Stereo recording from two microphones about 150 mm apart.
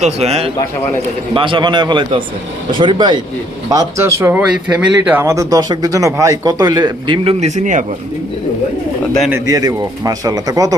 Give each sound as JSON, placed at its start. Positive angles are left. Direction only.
{"t": 0.0, "sound": "a man's voice", "side_deg": -45}
{"t": 3.7, "sound": "speech", "side_deg": -20}
{"t": 7.3, "sound": "speech", "side_deg": -50}
{"t": 9.3, "sound": "speech", "side_deg": -25}